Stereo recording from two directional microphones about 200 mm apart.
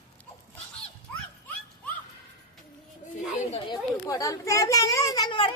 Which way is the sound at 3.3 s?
30° left (ahead or behind).